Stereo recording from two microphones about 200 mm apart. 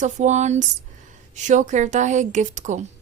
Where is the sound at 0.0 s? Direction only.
35° right (ahead or behind).